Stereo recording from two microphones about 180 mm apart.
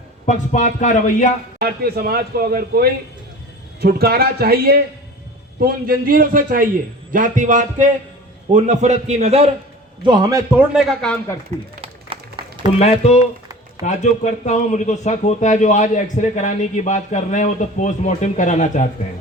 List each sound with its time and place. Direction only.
0.3 s speech: 45° left (ahead or behind)
1.5 s a man's voice: 60° right (ahead or behind); by 9.5 s 35° right (ahead or behind)
10.0 s a man's voice: 25° right (ahead or behind); by 11.2 s centre (ahead or behind)
11.5 s a man's voice: 40° right (ahead or behind)
12.1 s a sound: 30° right (ahead or behind)
12.8 s speech: 35° left (ahead or behind)